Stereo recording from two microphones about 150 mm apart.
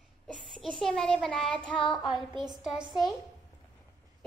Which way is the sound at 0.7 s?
Centre (ahead or behind).